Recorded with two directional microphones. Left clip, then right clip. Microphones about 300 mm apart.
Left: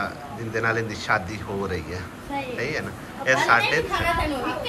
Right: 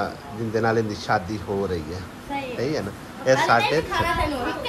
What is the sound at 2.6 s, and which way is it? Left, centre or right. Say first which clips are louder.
Speech: right 1 dB; centre.